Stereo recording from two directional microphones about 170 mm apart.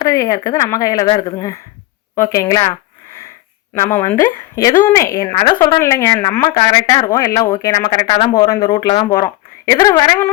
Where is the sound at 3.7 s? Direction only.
15° left (ahead or behind).